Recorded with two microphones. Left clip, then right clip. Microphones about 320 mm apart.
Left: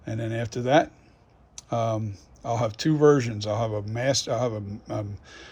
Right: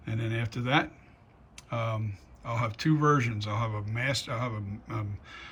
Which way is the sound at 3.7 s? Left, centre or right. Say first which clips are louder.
Left 5 dB; left.